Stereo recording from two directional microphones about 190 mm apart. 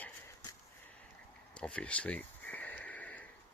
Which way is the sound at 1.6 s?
5° left (ahead or behind).